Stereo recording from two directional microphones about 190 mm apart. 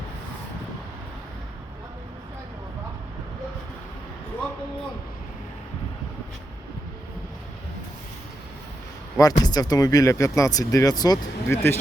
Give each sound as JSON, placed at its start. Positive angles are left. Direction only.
{"t": 9.1, "sound": "speech", "side_deg": 20}